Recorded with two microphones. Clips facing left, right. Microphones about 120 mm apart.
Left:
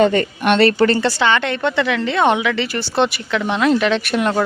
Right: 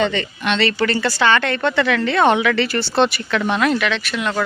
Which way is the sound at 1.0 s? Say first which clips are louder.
Even; 20° left (ahead or behind).